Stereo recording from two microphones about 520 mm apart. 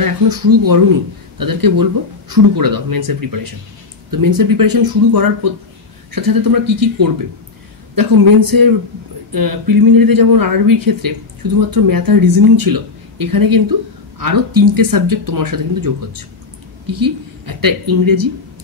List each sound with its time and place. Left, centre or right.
0.0 s speech: right